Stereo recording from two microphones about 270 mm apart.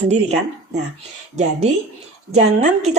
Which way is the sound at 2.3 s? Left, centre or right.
Right.